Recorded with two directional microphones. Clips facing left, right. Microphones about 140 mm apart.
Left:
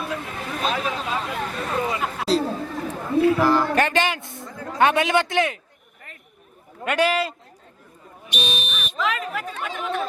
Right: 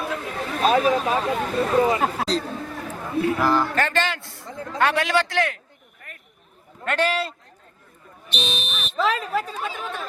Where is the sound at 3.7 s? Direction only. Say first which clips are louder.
Left 3 dB; 15° left (ahead or behind).